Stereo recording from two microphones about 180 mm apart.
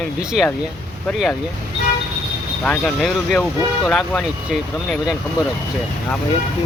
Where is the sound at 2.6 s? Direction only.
5° left (ahead or behind).